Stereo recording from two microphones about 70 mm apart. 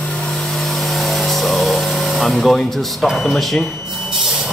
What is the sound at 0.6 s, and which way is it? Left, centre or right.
Vehicle, centre.